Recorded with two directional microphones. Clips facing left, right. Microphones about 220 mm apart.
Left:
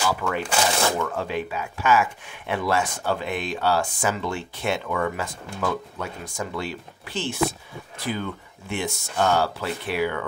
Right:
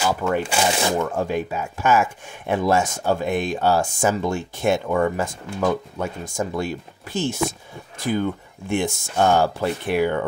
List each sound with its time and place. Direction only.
0.4 s speech: 10° right (ahead or behind)
1.1 s speech: 45° right (ahead or behind)